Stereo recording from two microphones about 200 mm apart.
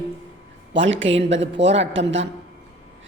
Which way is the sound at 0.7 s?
70° right (ahead or behind).